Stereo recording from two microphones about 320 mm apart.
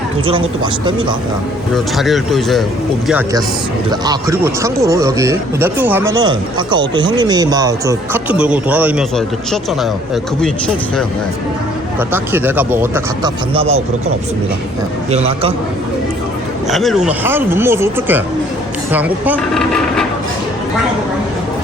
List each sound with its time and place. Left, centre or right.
0.3 s speech: centre
1.7 s speech: centre
11.9 s speech: centre
15.1 s a man's voice: centre
16.6 s speech: centre